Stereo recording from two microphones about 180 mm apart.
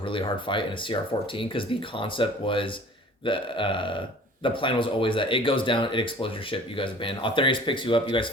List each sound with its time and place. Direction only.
0.0 s speech: 30° left (ahead or behind)